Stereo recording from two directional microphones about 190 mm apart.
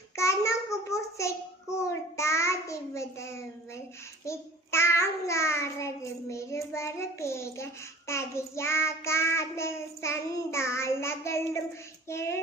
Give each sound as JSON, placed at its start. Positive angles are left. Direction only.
{"t": 0.2, "sound": "child singing", "side_deg": 15}
{"t": 4.3, "sound": "child singing", "side_deg": 15}